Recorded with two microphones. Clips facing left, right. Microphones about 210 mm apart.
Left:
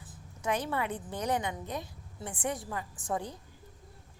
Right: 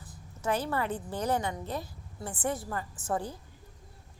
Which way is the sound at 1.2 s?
15° left (ahead or behind).